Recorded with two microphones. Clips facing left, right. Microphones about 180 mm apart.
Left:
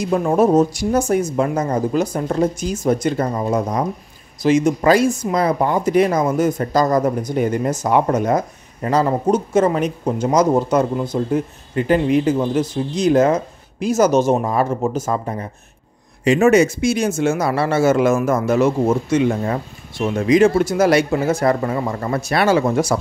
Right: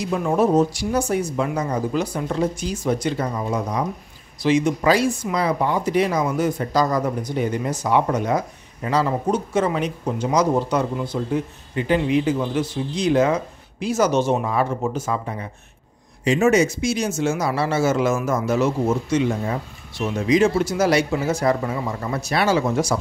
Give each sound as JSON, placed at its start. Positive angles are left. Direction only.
{"t": 0.0, "sound": "speech", "side_deg": 45}
{"t": 16.3, "sound": "speech", "side_deg": 60}